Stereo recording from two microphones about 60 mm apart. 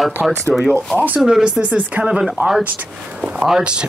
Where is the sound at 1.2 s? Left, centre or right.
Centre.